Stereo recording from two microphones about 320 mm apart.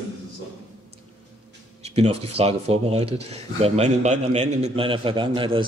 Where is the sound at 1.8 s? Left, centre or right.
Centre.